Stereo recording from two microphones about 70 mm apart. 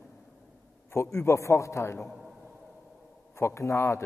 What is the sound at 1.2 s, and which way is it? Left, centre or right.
Speech, left.